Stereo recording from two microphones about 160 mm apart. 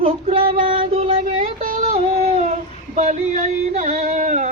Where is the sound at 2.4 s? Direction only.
50° right (ahead or behind).